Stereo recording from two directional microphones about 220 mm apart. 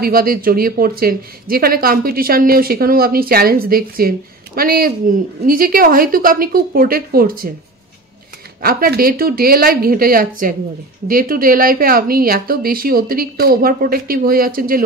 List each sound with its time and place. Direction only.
0.0 s a woman's voice: 40° right (ahead or behind)
8.5 s a woman's voice: 40° right (ahead or behind)